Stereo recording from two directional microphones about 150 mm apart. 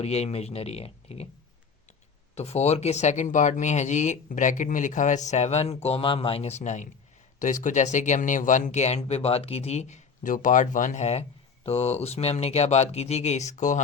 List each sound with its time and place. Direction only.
0.0 s speech: 45° left (ahead or behind)
2.3 s speech: 45° left (ahead or behind)